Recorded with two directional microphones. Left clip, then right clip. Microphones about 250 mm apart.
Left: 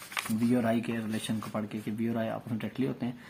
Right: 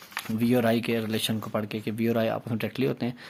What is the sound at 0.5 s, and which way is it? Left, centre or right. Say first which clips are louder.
Speech: right 7 dB; right.